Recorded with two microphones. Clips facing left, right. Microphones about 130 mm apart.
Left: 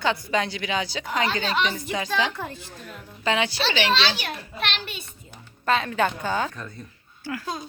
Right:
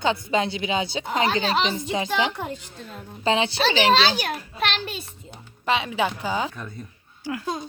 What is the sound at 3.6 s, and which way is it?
A child's voice, 45° right (ahead or behind).